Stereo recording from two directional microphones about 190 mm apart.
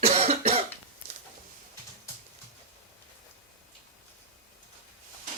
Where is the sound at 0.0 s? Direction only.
35° right (ahead or behind).